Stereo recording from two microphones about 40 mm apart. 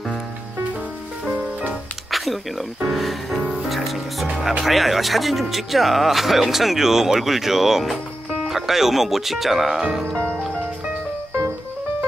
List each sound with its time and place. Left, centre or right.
1.3 s music: right
1.7 s music: centre
2.9 s speech: centre
9.8 s speech: centre